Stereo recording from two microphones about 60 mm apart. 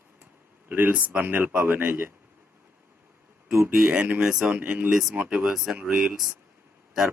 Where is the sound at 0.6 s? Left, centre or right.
Right.